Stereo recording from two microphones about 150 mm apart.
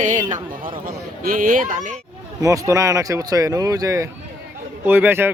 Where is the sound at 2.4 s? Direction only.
20° right (ahead or behind).